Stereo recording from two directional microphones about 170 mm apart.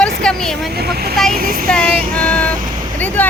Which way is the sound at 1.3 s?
60° right (ahead or behind).